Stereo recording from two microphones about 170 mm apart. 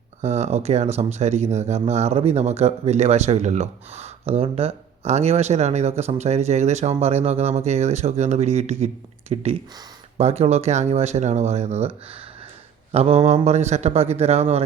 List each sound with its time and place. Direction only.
0.2 s speech: 40° right (ahead or behind)
12.9 s speech: 35° right (ahead or behind)